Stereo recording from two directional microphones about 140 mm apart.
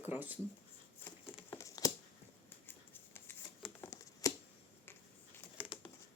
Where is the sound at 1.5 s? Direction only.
25° left (ahead or behind).